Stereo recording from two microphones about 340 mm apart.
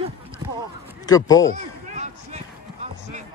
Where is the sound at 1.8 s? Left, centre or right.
Right.